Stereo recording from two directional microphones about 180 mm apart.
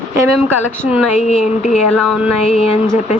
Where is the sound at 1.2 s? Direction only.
40° left (ahead or behind).